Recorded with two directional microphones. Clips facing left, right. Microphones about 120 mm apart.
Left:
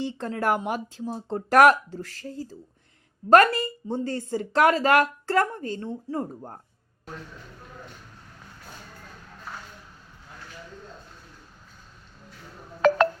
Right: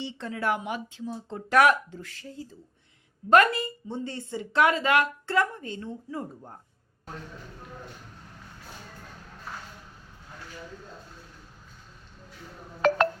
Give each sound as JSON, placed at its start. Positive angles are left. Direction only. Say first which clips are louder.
{"t": 0.0, "sound": "a woman's voice", "louder": "left 4 dB", "side_deg": 45}